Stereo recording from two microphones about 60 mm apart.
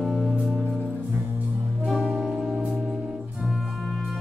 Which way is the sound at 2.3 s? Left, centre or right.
Right.